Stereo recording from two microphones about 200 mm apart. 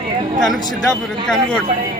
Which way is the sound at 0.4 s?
Centre (ahead or behind).